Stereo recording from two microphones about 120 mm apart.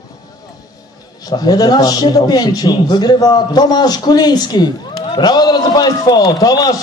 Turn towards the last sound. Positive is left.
turn(degrees=30)  # may be behind; listen again after turning